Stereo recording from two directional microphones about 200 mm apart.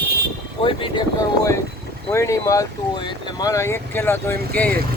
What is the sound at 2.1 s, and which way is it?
Speech, 15° left (ahead or behind).